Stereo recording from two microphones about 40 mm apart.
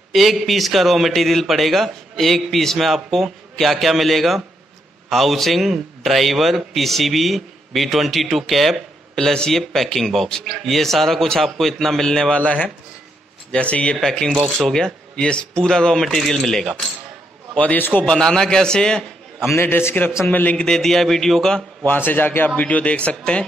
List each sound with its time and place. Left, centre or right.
0.1 s a man's voice: centre
9.2 s speech: centre
9.5 s speech: centre
13.5 s speech: left
14.0 s speech: centre
14.8 s speech: left; by 16.9 s centre
17.7 s speech: left
18.1 s speech: centre
19.6 s a man's voice: left
20.2 s a man's voice: left
20.5 s speech: centre
21.8 s speech: left
22.6 s a man's voice: left